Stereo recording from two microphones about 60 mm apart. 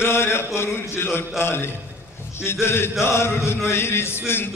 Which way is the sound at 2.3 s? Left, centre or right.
Left.